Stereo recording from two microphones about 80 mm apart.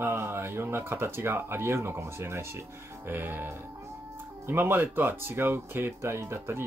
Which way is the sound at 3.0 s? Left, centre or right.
Right.